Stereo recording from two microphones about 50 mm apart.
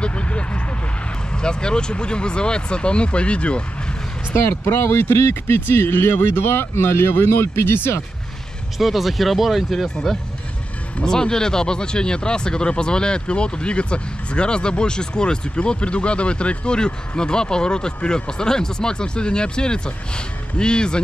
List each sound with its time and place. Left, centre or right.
0.0 s vehicle: left
1.3 s speech: centre
4.3 s speech: left
8.7 s speech: centre